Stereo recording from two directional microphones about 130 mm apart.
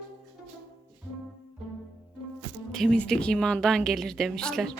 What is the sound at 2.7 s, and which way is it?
A woman's voice, 5° left (ahead or behind).